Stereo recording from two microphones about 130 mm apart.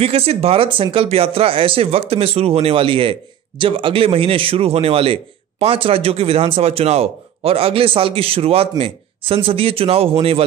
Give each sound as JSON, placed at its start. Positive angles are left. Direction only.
{"t": 0.0, "sound": "speech", "side_deg": -50}